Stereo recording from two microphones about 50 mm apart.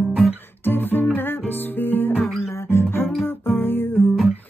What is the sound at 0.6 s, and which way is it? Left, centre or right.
Music, left.